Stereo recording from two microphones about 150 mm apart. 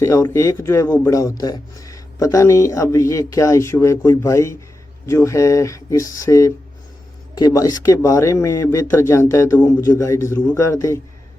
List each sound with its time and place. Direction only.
0.0 s speech: 20° left (ahead or behind)